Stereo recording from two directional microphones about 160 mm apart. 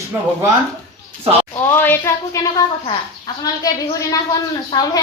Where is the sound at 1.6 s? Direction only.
15° left (ahead or behind).